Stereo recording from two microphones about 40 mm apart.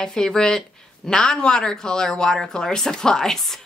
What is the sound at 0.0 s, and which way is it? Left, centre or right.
A woman's voice, centre.